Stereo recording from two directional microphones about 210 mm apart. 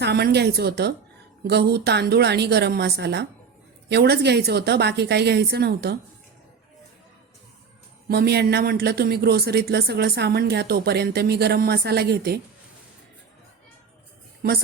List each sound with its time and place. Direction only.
0.0 s speech: 50° right (ahead or behind)
8.0 s speech: 50° right (ahead or behind)